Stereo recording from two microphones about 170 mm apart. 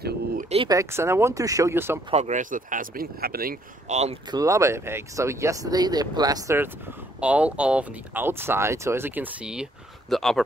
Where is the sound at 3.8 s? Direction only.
40° right (ahead or behind).